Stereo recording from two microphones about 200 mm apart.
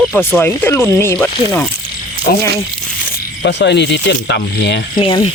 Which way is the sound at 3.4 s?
60° left (ahead or behind).